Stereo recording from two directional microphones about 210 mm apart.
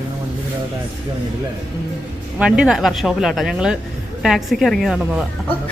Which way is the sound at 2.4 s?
5° right (ahead or behind).